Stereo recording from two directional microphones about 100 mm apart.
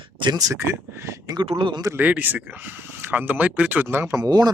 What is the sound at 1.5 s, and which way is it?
Speech, 55° right (ahead or behind).